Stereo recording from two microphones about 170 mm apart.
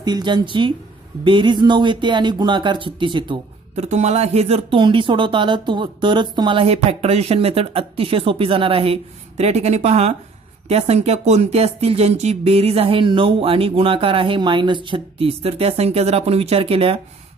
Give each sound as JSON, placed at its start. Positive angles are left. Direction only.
{"t": 0.0, "sound": "speech", "side_deg": -25}
{"t": 3.7, "sound": "speech", "side_deg": -40}